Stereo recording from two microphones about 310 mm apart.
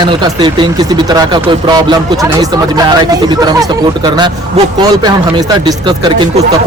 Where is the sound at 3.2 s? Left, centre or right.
Centre.